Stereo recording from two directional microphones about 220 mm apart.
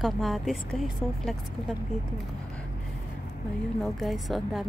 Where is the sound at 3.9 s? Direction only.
Centre (ahead or behind).